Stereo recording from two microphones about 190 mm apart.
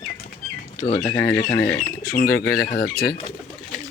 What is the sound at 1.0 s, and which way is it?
Speech, 15° left (ahead or behind).